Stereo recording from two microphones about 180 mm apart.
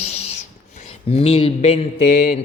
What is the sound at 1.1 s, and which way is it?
Speech, 35° left (ahead or behind).